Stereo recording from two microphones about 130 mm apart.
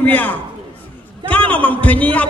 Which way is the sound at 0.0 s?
10° left (ahead or behind).